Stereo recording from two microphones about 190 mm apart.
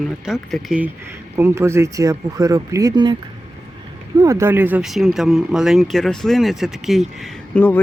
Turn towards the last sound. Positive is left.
turn(degrees=5)  # may be behind; listen again after turning